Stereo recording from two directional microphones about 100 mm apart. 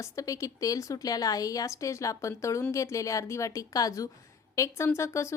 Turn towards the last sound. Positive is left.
turn(degrees=30)  # may be behind; listen again after turning